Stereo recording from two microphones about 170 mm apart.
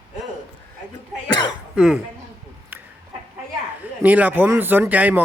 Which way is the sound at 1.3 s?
25° left (ahead or behind).